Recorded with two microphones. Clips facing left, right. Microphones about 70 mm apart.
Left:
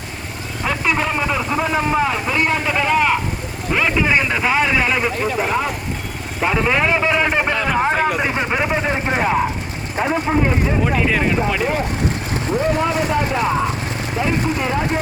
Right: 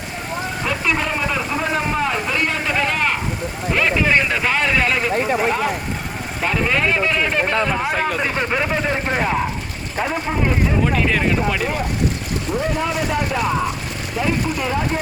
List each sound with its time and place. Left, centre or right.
0.6 s vehicle: centre
3.7 s speech: centre
5.4 s speech: centre
6.4 s speech: centre
10.8 s speech: centre
12.5 s speech: left